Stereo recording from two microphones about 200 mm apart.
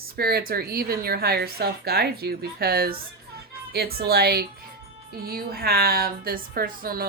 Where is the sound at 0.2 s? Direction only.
50° right (ahead or behind).